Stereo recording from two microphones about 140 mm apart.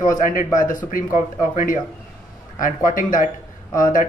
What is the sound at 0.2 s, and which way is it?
A man's voice, 75° left (ahead or behind).